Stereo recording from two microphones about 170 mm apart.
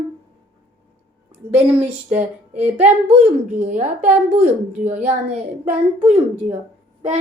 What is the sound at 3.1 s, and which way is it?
Speech, 45° right (ahead or behind).